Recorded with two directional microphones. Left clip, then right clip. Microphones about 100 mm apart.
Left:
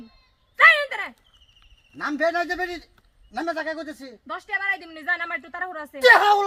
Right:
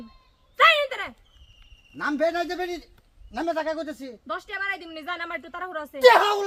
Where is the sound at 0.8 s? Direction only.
20° right (ahead or behind).